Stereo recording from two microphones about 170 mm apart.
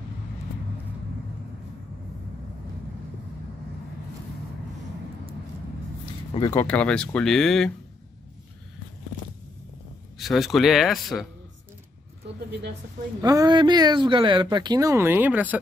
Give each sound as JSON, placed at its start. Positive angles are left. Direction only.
{"t": 6.5, "sound": "speech", "side_deg": 10}
{"t": 10.1, "sound": "speech", "side_deg": 0}
{"t": 13.2, "sound": "speech", "side_deg": -20}